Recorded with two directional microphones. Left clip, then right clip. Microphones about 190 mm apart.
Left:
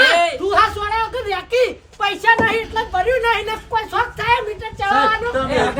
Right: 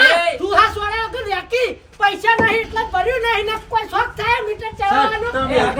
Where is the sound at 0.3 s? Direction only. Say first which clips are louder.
Right 1 dB; centre (ahead or behind).